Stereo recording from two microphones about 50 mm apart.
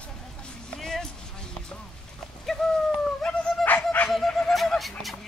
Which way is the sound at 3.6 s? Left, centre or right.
Left.